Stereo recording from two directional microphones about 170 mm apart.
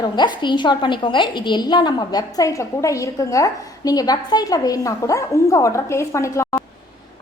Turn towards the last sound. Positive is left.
turn(degrees=15)  # may be behind; listen again after turning